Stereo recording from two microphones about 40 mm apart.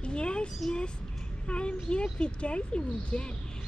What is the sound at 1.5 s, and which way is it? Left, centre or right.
Speech, left.